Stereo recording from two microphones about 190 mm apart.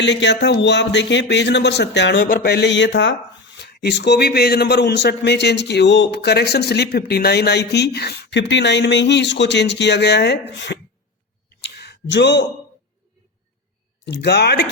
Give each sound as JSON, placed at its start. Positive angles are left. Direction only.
{"t": 0.0, "sound": "a man's voice", "side_deg": 70}
{"t": 11.4, "sound": "a sound", "side_deg": 60}
{"t": 14.0, "sound": "a man's voice", "side_deg": 65}